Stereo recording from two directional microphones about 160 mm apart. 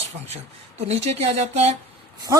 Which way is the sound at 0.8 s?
40° right (ahead or behind).